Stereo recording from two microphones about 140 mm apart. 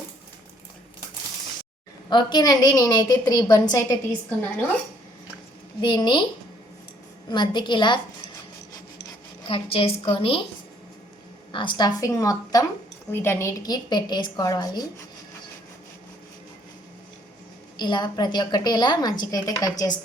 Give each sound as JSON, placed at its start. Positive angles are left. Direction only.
{"t": 2.0, "sound": "a woman's voice", "side_deg": 30}
{"t": 5.8, "sound": "a woman's voice", "side_deg": 35}
{"t": 7.3, "sound": "a woman's voice", "side_deg": 30}
{"t": 9.5, "sound": "a woman's voice", "side_deg": 40}
{"t": 11.5, "sound": "a woman's voice", "side_deg": 35}
{"t": 17.7, "sound": "a woman's voice", "side_deg": 30}